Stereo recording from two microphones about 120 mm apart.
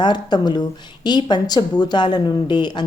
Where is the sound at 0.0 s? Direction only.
35° left (ahead or behind).